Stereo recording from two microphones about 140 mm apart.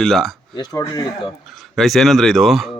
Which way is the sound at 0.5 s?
30° left (ahead or behind).